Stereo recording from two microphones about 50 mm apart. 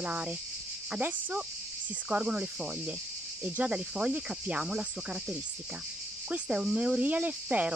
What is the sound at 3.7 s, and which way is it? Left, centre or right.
Cricket, right.